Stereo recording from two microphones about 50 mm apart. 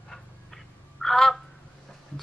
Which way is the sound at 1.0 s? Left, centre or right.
Centre.